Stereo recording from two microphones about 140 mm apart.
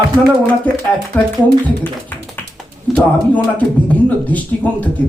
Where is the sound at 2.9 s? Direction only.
10° left (ahead or behind).